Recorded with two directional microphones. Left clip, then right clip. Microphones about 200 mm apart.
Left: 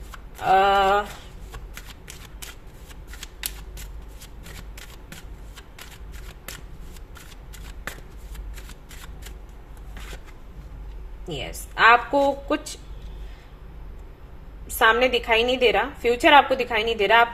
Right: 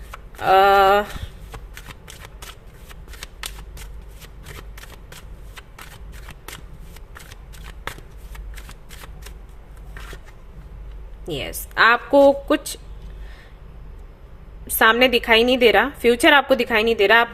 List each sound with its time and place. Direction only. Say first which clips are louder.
0.3 s a sound: right 4 dB; 35° right (ahead or behind)
11.3 s a woman's voice: right 4 dB; 35° right (ahead or behind)
14.8 s a woman's voice: right 3 dB; 35° right (ahead or behind)